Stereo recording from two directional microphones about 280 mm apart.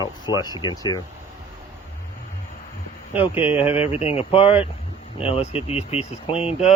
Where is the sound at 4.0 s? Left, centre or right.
Left.